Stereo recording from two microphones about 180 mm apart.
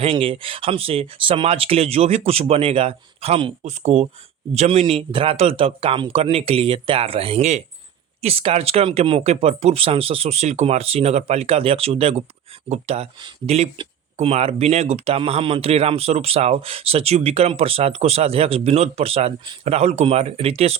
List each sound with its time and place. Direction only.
0.0 s speech: 30° right (ahead or behind)